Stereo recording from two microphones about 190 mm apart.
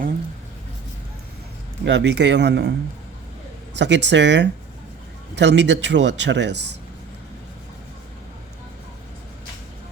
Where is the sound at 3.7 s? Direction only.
70° right (ahead or behind).